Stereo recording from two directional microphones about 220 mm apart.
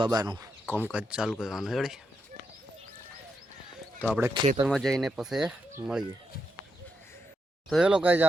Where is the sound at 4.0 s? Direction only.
10° right (ahead or behind).